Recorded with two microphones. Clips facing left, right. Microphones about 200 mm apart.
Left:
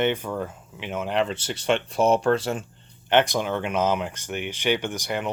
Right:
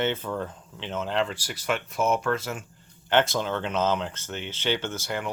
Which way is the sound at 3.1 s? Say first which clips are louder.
Left 2 dB; 15° left (ahead or behind).